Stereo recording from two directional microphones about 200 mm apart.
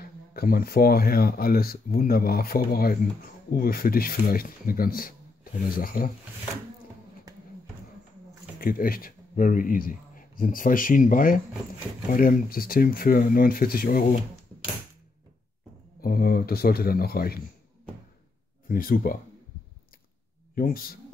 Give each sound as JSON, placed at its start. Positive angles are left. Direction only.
{"t": 0.0, "sound": "speech", "side_deg": 50}
{"t": 8.5, "sound": "speech", "side_deg": 45}
{"t": 16.0, "sound": "speech", "side_deg": 50}
{"t": 18.7, "sound": "speech", "side_deg": 45}
{"t": 20.5, "sound": "speech", "side_deg": 45}